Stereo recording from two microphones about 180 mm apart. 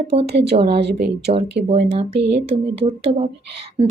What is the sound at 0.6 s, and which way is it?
Speech, 65° right (ahead or behind).